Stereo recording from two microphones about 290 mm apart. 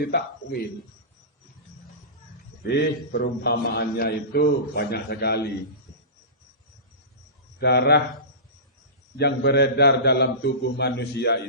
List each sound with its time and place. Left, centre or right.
0.0 s a man's voice: left
2.6 s a man's voice: left
7.6 s a man's voice: left
9.1 s a man's voice: left